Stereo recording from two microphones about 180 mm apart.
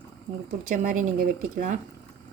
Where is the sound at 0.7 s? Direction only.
50° right (ahead or behind).